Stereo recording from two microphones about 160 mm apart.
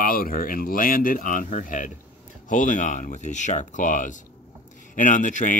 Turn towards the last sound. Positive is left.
turn(degrees=55)  # may be behind; listen again after turning